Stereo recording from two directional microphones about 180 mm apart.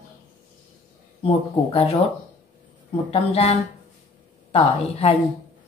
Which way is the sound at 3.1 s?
35° left (ahead or behind).